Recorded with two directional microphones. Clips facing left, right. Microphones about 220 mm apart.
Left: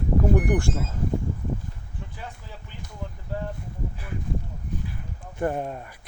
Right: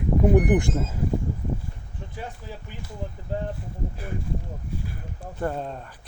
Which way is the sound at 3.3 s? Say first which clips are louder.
Right 2 dB; 20° right (ahead or behind).